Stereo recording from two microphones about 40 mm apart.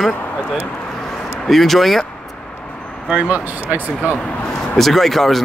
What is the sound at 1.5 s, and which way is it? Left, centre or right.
Speech, centre.